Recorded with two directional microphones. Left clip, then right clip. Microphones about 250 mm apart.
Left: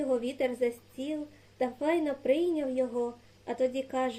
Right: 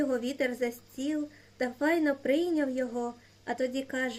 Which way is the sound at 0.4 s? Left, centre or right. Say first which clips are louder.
Left 2 dB; right.